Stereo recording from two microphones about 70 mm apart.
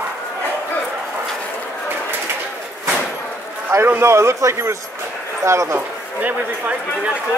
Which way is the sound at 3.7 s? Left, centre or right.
Right.